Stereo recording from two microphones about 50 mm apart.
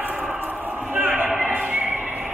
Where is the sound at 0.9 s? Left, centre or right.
Right.